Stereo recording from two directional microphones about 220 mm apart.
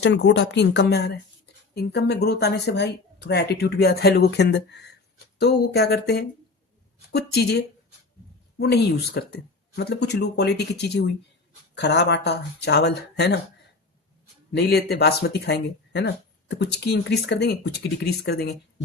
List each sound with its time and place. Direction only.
0.0 s speech: 50° left (ahead or behind)
14.5 s speech: 45° left (ahead or behind)